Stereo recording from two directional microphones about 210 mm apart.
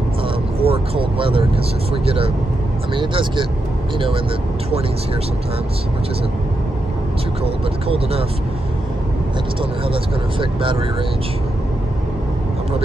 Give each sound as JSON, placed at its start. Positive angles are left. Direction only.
{"t": 0.6, "sound": "speech", "side_deg": -25}
{"t": 7.4, "sound": "speech", "side_deg": -30}
{"t": 10.4, "sound": "speech", "side_deg": -25}